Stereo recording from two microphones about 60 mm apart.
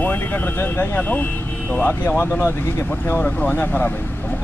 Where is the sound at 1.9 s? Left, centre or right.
Left.